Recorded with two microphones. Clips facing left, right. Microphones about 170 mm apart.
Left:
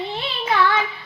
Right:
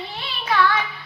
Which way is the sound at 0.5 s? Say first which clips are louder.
Even; 25° left (ahead or behind).